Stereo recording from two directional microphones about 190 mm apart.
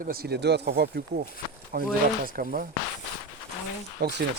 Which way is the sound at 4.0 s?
60° right (ahead or behind).